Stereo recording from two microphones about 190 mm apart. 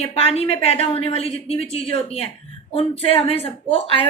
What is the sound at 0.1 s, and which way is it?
A woman's voice, 30° left (ahead or behind).